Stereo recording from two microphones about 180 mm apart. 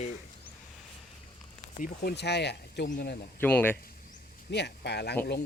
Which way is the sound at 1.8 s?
65° left (ahead or behind).